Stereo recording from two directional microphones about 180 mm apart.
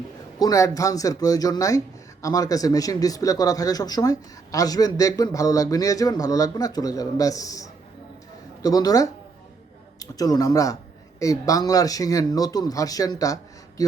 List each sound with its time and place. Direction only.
0.3 s speech: 20° left (ahead or behind)